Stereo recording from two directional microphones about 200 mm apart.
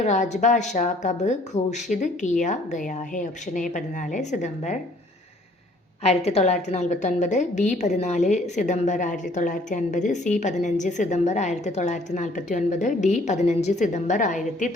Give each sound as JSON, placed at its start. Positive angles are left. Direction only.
{"t": 0.0, "sound": "a woman's voice", "side_deg": 35}
{"t": 6.0, "sound": "a woman's voice", "side_deg": 30}